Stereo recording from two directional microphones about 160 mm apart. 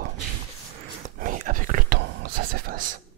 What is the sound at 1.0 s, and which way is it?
Whispering, 55° right (ahead or behind).